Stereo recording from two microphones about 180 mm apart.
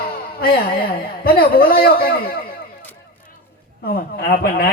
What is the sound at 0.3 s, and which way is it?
A man's voice, 55° left (ahead or behind).